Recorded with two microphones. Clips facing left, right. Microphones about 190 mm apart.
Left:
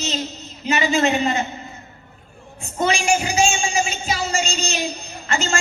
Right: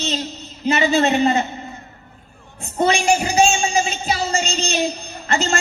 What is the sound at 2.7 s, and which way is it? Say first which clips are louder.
A woman's voice: right 3 dB; 35° right (ahead or behind).